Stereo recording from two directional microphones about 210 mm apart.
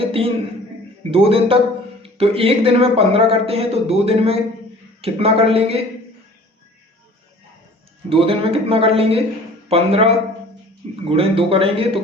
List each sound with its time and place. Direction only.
0.0 s a sound: 25° right (ahead or behind)
1.1 s speech: 25° right (ahead or behind)
8.1 s speech: 25° right (ahead or behind)